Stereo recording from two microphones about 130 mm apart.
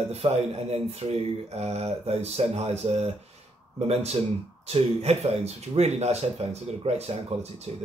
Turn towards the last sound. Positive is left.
turn(degrees=-55)  # may be behind; listen again after turning